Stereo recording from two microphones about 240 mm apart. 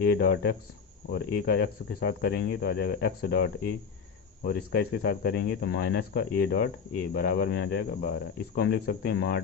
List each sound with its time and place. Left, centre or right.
0.0 s speech: left